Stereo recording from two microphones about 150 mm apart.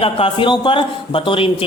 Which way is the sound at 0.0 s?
35° left (ahead or behind).